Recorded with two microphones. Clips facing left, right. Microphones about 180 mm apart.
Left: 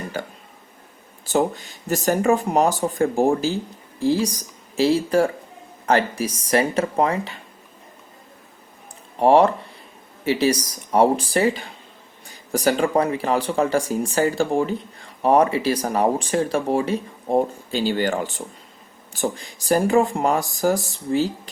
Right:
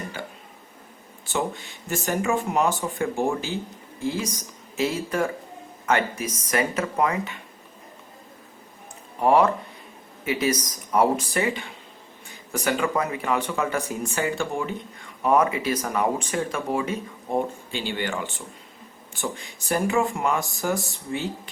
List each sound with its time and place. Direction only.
1.3 s speech: 40° left (ahead or behind)
9.1 s speech: 30° left (ahead or behind)